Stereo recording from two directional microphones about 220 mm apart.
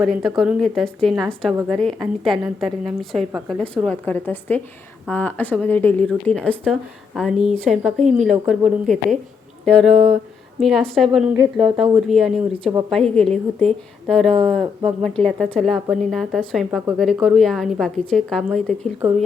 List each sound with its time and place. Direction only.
0.0 s a woman's voice: centre (ahead or behind)
9.9 s a sound: 30° right (ahead or behind)
10.6 s a woman's voice: centre (ahead or behind)